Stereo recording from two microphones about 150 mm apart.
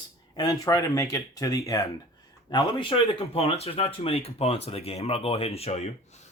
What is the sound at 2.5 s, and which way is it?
Speech, 35° left (ahead or behind).